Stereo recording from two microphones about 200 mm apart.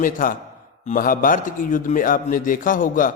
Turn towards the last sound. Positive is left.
turn(degrees=40)  # may be behind; listen again after turning